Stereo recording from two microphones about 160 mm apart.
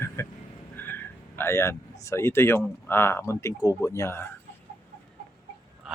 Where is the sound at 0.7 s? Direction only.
15° left (ahead or behind).